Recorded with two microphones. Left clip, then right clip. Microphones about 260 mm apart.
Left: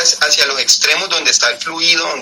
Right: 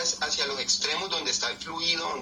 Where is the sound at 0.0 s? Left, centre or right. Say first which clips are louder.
Left 16 dB; left.